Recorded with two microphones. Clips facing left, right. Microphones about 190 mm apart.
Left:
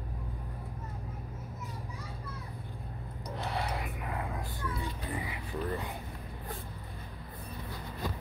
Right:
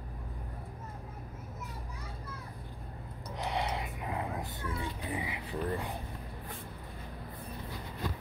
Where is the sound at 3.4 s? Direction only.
20° right (ahead or behind).